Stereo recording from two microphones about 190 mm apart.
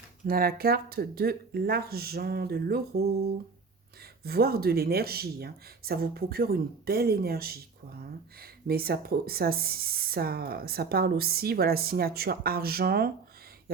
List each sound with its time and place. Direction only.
0.3 s speech: 50° right (ahead or behind)
4.2 s speech: 55° right (ahead or behind)